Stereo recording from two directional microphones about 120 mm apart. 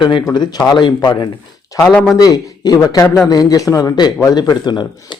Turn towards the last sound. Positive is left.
turn(degrees=35)  # may be behind; listen again after turning